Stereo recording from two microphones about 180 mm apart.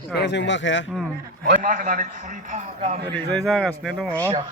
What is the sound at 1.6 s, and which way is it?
A man's voice, 45° right (ahead or behind).